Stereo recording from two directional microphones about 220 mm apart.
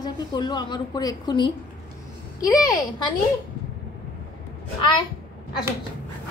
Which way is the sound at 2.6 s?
15° left (ahead or behind).